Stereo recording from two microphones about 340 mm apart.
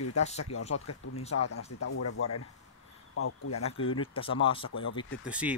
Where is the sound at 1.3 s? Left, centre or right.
Left.